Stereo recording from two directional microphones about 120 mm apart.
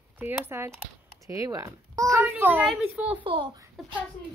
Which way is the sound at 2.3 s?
15° right (ahead or behind).